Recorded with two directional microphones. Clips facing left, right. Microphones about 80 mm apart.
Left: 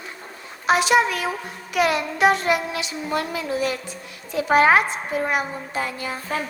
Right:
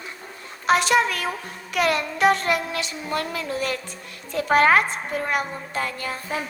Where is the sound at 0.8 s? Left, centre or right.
Right.